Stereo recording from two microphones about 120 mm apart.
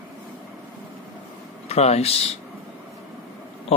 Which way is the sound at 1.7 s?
60° left (ahead or behind).